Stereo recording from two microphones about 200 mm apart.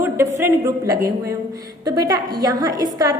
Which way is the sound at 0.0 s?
10° right (ahead or behind).